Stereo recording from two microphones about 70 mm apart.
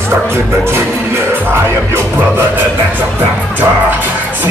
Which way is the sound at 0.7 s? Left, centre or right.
Right.